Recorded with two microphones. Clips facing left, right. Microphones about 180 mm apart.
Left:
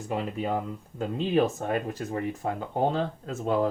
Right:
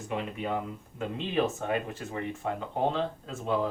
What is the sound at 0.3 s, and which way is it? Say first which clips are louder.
Speech: left 3 dB; 35° left (ahead or behind).